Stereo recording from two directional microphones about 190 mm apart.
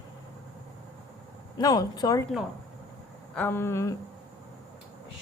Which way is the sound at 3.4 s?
10° left (ahead or behind).